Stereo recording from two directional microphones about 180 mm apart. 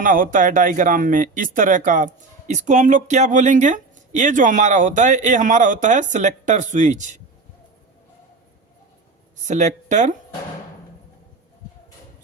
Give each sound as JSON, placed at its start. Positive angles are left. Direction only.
{"t": 0.0, "sound": "speech", "side_deg": -50}
{"t": 9.5, "sound": "speech", "side_deg": -40}